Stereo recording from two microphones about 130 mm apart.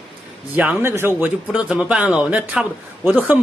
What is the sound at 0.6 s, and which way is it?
Speech, 15° right (ahead or behind).